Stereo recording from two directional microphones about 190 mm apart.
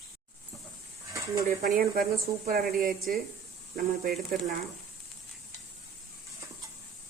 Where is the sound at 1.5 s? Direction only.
50° right (ahead or behind).